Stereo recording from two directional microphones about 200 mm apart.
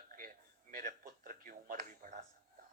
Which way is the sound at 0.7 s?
45° right (ahead or behind).